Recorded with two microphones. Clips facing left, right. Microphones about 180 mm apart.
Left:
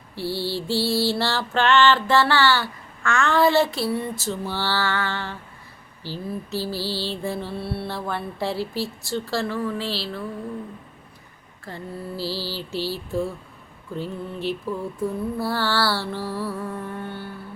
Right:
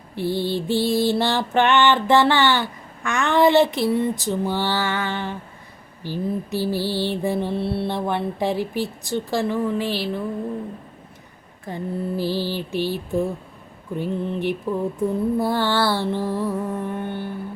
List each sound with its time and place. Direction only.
0.2 s music: 20° right (ahead or behind)
11.6 s music: 20° right (ahead or behind)